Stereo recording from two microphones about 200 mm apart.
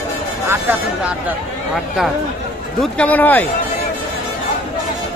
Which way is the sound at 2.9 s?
10° left (ahead or behind).